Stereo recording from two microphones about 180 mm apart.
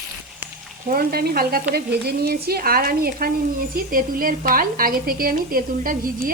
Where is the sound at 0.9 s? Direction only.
55° right (ahead or behind).